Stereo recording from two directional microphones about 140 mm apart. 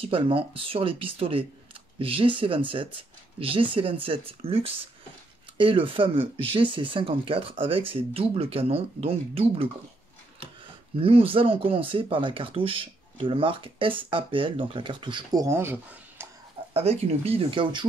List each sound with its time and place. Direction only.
0.0 s speech: 40° right (ahead or behind)
11.0 s speech: 40° right (ahead or behind)
15.4 s speech: 15° right (ahead or behind)
16.7 s speech: 45° right (ahead or behind)